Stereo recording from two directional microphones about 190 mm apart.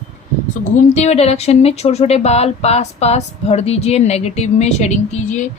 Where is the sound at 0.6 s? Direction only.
35° left (ahead or behind).